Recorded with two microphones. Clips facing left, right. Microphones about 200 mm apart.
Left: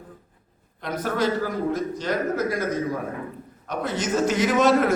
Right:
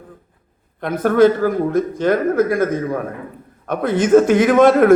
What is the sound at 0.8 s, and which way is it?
A man's voice, 55° right (ahead or behind).